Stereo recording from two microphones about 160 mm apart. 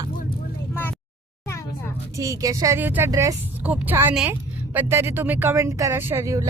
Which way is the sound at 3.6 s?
10° right (ahead or behind).